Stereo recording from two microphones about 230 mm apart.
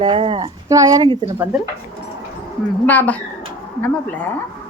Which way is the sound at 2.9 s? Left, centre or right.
Centre.